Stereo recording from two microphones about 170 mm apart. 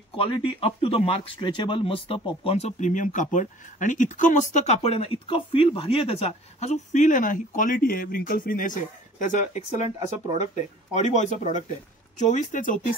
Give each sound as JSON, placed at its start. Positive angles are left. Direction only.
{"t": 0.1, "sound": "speech", "side_deg": 30}
{"t": 9.8, "sound": "speech", "side_deg": -20}
{"t": 10.9, "sound": "speech", "side_deg": 45}